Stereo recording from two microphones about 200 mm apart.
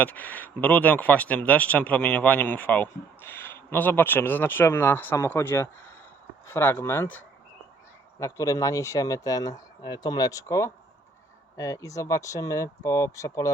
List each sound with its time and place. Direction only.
0.0 s speech: 10° left (ahead or behind)
8.2 s speech: 15° left (ahead or behind)